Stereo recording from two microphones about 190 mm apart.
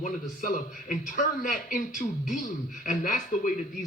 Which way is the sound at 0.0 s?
45° left (ahead or behind).